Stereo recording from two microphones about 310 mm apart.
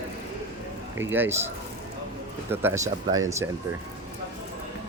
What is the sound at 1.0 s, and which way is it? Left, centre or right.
Speech, centre.